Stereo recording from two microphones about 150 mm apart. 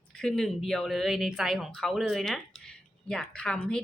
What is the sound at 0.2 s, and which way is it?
A woman's voice, 5° left (ahead or behind).